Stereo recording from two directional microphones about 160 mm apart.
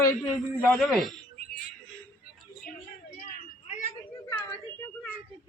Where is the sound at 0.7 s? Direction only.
Centre (ahead or behind).